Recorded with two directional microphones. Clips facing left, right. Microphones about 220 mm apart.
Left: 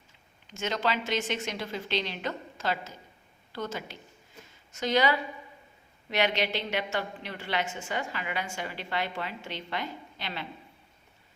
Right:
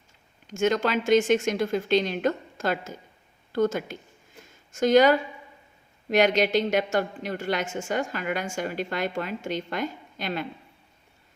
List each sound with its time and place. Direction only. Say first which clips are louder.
0.4 s a woman's voice: right 7 dB; 50° right (ahead or behind)